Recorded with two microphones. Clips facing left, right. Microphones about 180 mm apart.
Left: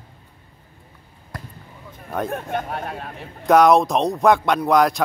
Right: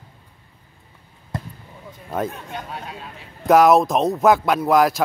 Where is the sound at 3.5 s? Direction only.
Centre (ahead or behind).